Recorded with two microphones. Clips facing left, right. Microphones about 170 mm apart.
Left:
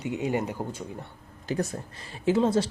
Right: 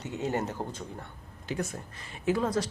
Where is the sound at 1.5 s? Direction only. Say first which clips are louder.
Left 4 dB; 35° left (ahead or behind).